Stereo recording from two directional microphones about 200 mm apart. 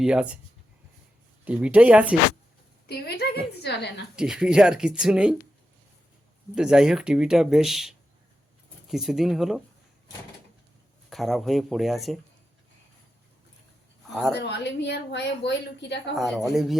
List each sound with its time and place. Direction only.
0.0 s speech: 5° right (ahead or behind)
1.5 s speech: 5° right (ahead or behind)
2.8 s a woman's voice: 55° left (ahead or behind)
4.1 s speech: 5° right (ahead or behind)
6.6 s speech: 5° right (ahead or behind)
11.1 s speech: centre (ahead or behind)
14.1 s speech: centre (ahead or behind)
14.3 s a woman's voice: 60° left (ahead or behind)
16.1 s speech: centre (ahead or behind)